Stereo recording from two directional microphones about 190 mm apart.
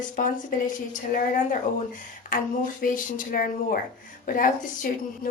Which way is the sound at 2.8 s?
45° left (ahead or behind).